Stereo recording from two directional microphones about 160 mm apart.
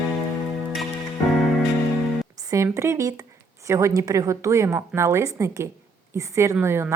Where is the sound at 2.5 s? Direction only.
20° right (ahead or behind).